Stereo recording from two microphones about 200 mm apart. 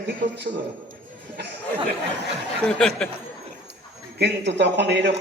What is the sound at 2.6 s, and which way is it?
Speech, 5° left (ahead or behind).